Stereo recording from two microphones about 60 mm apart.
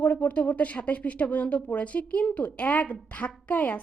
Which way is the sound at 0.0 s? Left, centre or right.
Left.